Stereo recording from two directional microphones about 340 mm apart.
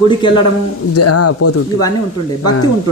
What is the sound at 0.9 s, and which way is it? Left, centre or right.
Speech, left.